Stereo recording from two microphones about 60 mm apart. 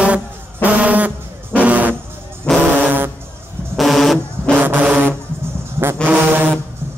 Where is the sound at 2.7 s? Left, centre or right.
Right.